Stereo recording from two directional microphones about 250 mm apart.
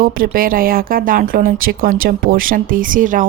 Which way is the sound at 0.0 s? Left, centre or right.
Right.